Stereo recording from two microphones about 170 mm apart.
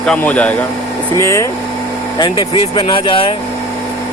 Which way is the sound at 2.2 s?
25° left (ahead or behind).